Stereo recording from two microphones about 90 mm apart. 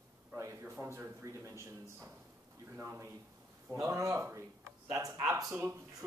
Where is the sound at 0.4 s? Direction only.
35° right (ahead or behind).